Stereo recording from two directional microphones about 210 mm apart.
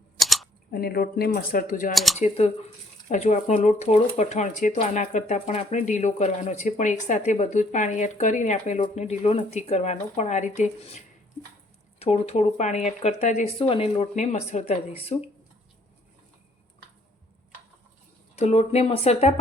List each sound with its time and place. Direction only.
0.2 s camera: centre (ahead or behind)
0.7 s speech: 45° left (ahead or behind)
1.9 s speech: centre (ahead or behind)
2.1 s speech: 30° left (ahead or behind)
18.3 s speech: 30° left (ahead or behind)